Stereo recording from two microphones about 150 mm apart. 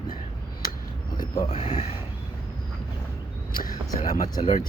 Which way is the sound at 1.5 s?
45° left (ahead or behind).